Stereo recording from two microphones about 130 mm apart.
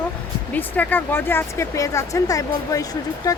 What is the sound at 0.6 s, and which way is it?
Speech, 15° left (ahead or behind).